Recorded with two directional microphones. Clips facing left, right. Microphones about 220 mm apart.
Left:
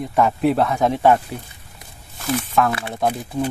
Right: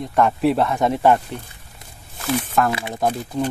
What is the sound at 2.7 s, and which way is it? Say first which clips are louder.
Speech: even; 15° right (ahead or behind).